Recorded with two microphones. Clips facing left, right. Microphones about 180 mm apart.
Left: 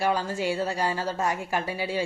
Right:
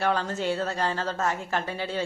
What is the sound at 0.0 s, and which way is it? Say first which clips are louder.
A woman's voice: even; 10° left (ahead or behind).